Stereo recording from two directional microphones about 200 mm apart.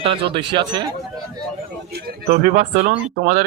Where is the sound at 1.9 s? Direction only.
50° right (ahead or behind).